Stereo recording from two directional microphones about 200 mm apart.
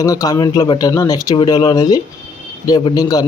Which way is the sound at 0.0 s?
20° left (ahead or behind).